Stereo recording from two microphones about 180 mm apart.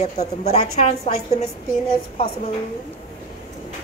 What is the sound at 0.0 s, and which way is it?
A woman's voice, 35° left (ahead or behind).